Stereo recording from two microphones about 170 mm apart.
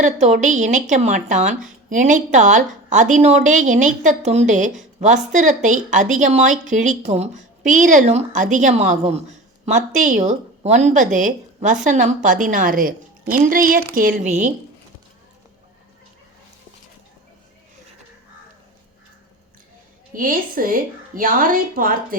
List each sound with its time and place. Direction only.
0.0 s speech: 45° right (ahead or behind)
20.1 s speech: 55° right (ahead or behind)